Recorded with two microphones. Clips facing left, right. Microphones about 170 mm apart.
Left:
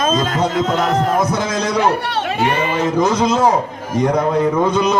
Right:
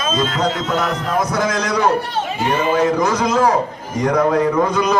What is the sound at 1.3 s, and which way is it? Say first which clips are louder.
Speech: even; 25° left (ahead or behind).